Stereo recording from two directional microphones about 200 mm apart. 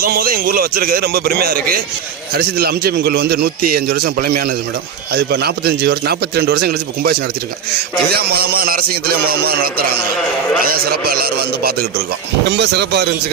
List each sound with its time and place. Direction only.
0.0 s a man's voice: 45° right (ahead or behind)